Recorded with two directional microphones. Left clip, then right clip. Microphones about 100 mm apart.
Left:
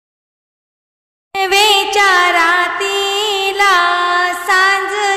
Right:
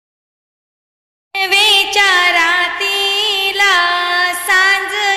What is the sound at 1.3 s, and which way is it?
Music, 55° left (ahead or behind).